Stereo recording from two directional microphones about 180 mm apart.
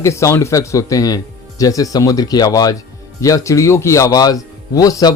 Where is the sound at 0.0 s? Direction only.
15° left (ahead or behind).